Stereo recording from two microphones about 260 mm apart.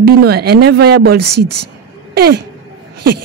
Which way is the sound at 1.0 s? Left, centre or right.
Right.